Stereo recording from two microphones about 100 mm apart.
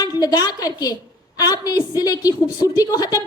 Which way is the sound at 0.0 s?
40° left (ahead or behind).